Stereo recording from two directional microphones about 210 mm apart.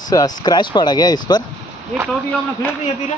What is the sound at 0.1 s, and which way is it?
Speech, 15° left (ahead or behind).